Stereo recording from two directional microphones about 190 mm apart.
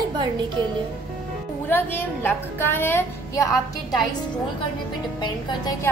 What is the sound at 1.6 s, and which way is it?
A woman's voice, 10° left (ahead or behind).